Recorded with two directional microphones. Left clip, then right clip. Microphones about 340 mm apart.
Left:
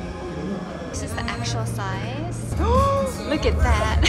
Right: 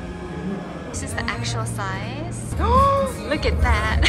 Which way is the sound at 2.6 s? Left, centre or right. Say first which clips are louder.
Right 3 dB; centre.